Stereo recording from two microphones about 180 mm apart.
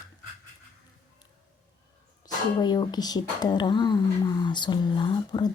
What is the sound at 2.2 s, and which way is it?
Speech, 20° left (ahead or behind).